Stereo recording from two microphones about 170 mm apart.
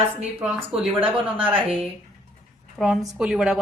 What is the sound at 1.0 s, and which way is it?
Speech, 30° right (ahead or behind).